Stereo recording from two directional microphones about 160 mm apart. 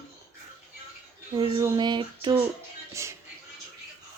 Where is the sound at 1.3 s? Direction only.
30° right (ahead or behind).